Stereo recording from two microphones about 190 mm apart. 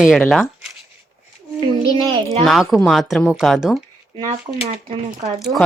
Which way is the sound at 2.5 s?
Centre (ahead or behind).